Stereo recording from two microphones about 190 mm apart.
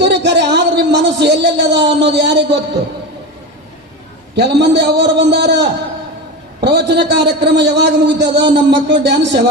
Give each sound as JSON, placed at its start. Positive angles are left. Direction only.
{"t": 0.0, "sound": "a man's voice", "side_deg": -65}
{"t": 4.6, "sound": "a man's voice", "side_deg": -65}